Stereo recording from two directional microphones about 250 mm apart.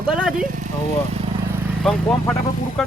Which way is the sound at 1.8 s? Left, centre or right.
Centre.